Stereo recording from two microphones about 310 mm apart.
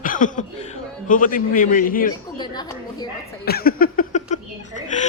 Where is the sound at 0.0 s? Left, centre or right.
Left.